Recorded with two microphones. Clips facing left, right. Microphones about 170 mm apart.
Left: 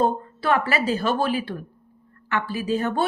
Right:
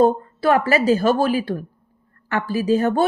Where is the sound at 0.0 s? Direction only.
45° right (ahead or behind).